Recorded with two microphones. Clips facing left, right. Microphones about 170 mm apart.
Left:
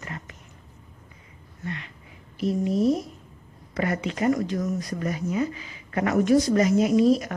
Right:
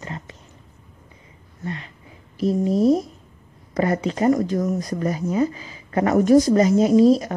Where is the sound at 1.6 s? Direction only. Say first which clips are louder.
Right 3 dB; 35° right (ahead or behind).